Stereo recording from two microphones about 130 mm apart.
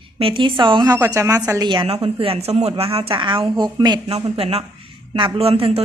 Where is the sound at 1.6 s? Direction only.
45° right (ahead or behind).